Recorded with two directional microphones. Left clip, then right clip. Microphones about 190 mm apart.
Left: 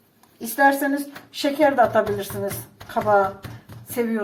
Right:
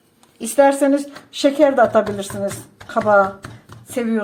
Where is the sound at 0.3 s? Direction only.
50° right (ahead or behind).